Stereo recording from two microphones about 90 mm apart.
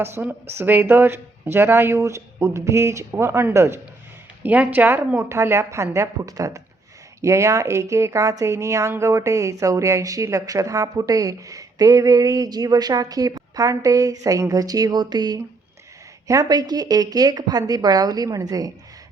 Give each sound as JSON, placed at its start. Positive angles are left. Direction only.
{"t": 0.0, "sound": "speech", "side_deg": -25}
{"t": 4.4, "sound": "a woman's voice", "side_deg": -20}